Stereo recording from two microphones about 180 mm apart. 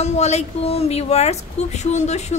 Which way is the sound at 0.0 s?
40° left (ahead or behind).